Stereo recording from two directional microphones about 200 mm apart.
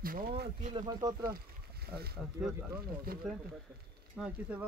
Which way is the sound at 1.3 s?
50° right (ahead or behind).